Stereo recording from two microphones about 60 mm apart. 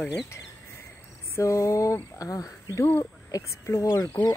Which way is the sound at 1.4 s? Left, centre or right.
Left.